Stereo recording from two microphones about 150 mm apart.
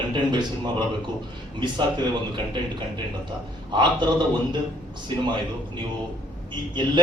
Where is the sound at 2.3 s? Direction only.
30° right (ahead or behind).